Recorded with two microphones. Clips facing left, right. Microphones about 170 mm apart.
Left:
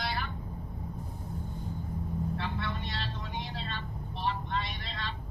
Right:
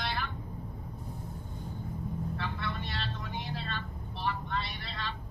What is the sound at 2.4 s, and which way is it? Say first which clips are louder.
Vehicle: left 1 dB; 15° left (ahead or behind).